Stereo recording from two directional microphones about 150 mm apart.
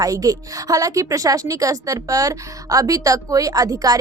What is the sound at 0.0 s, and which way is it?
Speech, 25° right (ahead or behind).